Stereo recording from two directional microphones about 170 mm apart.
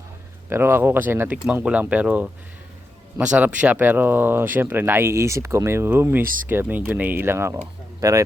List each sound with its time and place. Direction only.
0.5 s speech: 15° right (ahead or behind)